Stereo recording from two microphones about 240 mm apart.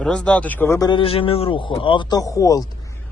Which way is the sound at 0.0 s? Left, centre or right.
Centre.